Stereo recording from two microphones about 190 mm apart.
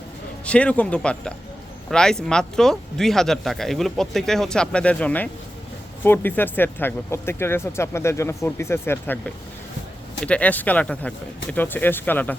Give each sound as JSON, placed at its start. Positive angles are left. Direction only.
{"t": 0.4, "sound": "speech", "side_deg": 5}